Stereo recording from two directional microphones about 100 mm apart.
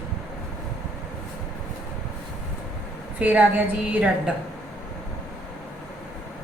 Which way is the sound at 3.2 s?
20° right (ahead or behind).